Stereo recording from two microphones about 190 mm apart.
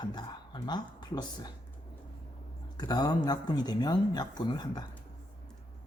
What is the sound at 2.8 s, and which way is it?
Speech, 20° left (ahead or behind).